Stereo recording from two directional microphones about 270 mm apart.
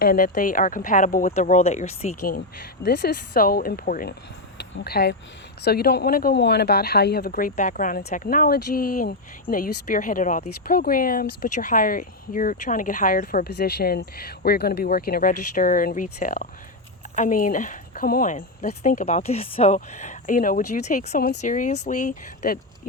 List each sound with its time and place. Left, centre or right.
0.0 s speech: left